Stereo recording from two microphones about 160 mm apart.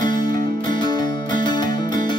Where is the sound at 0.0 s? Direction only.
25° left (ahead or behind).